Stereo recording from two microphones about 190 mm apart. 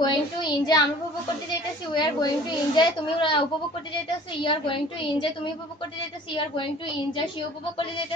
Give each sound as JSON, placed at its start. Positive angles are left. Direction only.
{"t": 0.0, "sound": "child singing", "side_deg": 20}
{"t": 1.9, "sound": "a woman's voice", "side_deg": 25}